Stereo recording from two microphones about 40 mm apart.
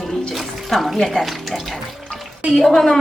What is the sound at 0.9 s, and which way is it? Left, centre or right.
Speech, centre.